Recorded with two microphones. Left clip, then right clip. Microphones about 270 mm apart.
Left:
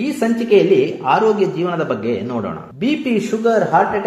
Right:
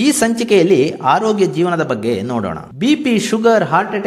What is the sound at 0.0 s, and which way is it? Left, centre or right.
A man's voice, right.